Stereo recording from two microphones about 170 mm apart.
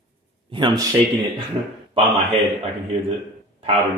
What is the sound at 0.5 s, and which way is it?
Speech, 25° right (ahead or behind).